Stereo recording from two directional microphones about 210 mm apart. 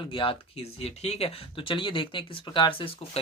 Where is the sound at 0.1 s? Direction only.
25° left (ahead or behind).